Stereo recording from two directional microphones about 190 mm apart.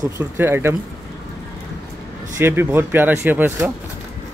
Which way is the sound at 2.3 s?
10° right (ahead or behind).